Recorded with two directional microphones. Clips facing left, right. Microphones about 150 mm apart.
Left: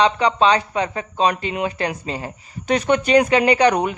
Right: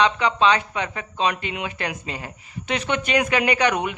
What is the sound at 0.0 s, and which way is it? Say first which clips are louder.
Speech: left 3 dB; 35° left (ahead or behind).